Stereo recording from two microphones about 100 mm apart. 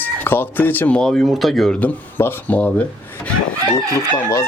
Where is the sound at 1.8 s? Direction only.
20° left (ahead or behind).